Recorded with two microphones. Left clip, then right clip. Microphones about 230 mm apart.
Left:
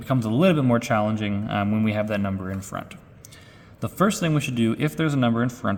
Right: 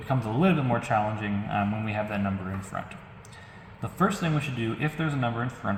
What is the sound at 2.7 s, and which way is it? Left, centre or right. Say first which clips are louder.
Speech: left 1 dB; left.